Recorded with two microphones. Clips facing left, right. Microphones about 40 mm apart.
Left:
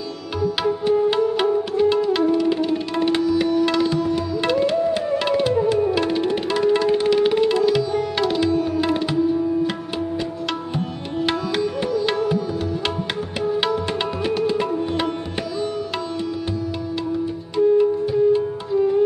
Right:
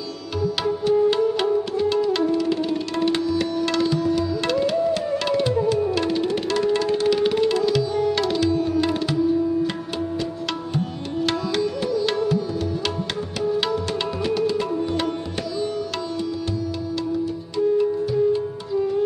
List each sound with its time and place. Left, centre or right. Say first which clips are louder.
0.4 s music: left 2 dB; centre
8.1 s tabla: left 1 dB; centre
11.2 s tabla: left 1 dB; centre
13.4 s music: left 1 dB; centre
17.6 s music: left 4 dB; centre